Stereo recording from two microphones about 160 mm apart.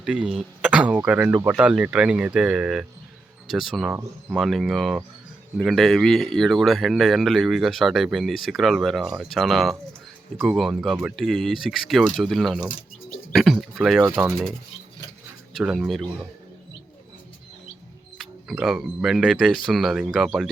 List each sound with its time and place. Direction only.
0.0 s speech: 5° right (ahead or behind)
15.5 s speech: centre (ahead or behind)
18.2 s speech: centre (ahead or behind)